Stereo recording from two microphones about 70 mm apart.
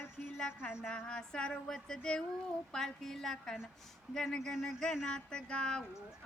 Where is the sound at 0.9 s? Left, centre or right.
Centre.